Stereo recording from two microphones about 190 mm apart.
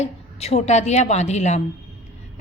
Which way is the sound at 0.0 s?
35° left (ahead or behind).